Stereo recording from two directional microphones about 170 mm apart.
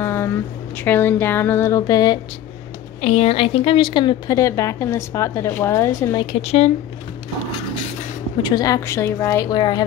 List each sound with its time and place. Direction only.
0.0 s a sound: 15° left (ahead or behind)
0.8 s a woman's voice: 10° left (ahead or behind)
3.0 s a woman's voice: 40° left (ahead or behind); by 6.2 s 15° left (ahead or behind)
6.4 s speech: 40° left (ahead or behind)
8.4 s a woman's voice: 25° left (ahead or behind)